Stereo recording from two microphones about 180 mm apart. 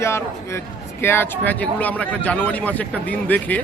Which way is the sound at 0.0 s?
15° left (ahead or behind).